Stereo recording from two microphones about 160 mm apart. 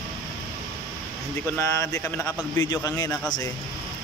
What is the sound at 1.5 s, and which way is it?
A man's voice, 15° left (ahead or behind).